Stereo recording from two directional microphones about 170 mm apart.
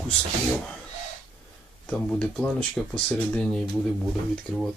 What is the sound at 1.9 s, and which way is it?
Speech, 5° left (ahead or behind).